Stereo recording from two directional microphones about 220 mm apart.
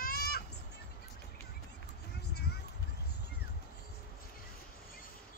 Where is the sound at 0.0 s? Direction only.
45° left (ahead or behind).